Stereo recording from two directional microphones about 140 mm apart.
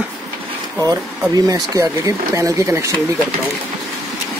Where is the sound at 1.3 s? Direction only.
25° right (ahead or behind).